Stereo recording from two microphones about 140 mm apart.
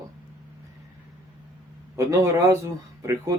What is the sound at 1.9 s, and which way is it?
Speech, 20° right (ahead or behind).